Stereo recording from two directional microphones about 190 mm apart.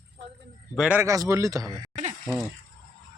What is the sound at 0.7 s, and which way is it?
Speech, 5° right (ahead or behind).